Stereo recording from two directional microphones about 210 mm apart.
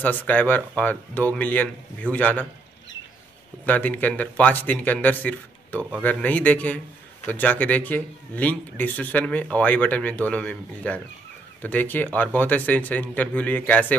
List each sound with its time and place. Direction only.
0.0 s speech: 5° left (ahead or behind)
3.6 s speech: 10° left (ahead or behind)
5.8 s speech: 5° right (ahead or behind)
6.0 s speech: 10° left (ahead or behind)